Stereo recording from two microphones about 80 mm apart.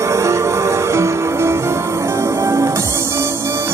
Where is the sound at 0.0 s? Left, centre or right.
Right.